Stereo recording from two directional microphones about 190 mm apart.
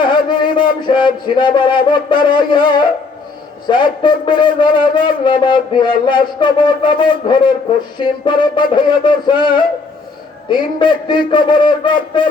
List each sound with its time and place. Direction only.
0.0 s music: 25° left (ahead or behind)
2.2 s a man's voice: 25° left (ahead or behind)